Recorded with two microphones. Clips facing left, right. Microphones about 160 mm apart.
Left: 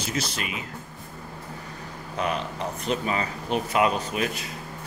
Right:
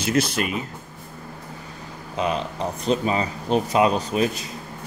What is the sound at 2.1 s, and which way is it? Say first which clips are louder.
Speech: right 3 dB; 30° right (ahead or behind).